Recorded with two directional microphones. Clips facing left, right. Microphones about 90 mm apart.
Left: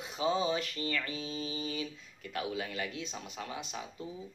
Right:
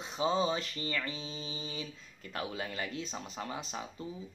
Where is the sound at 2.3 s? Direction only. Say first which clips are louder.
Left 1 dB; 35° right (ahead or behind).